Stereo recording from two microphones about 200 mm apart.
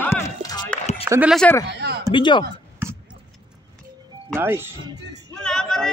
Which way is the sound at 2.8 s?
10° right (ahead or behind).